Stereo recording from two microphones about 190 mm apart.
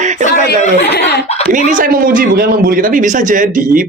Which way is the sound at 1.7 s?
45° right (ahead or behind).